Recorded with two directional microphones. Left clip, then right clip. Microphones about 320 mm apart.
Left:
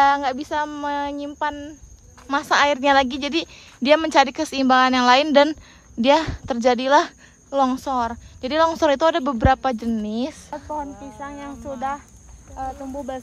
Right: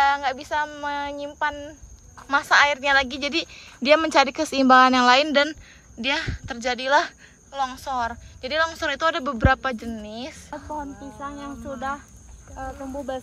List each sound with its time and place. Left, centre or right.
0.0 s a woman's voice: centre